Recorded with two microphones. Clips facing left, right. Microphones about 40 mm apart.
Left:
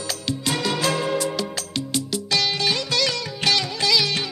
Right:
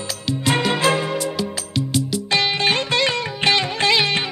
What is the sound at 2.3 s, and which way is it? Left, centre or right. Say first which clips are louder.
Music: right 4 dB; right.